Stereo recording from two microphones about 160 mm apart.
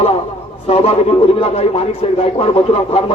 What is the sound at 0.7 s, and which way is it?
A man's voice, 40° left (ahead or behind).